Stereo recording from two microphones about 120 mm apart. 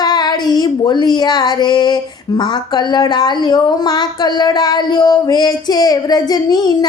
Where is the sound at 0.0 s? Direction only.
35° left (ahead or behind).